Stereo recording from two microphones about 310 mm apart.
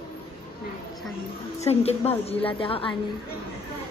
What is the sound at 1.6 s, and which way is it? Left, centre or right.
A woman's voice, centre.